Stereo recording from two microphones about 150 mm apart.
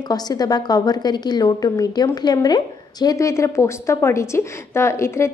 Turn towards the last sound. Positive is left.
turn(degrees=20)  # may be behind; listen again after turning